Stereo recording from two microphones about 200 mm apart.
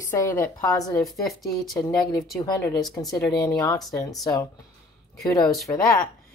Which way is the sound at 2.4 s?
15° left (ahead or behind).